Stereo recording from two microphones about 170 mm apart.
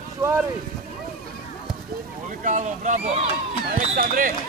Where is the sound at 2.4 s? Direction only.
45° right (ahead or behind).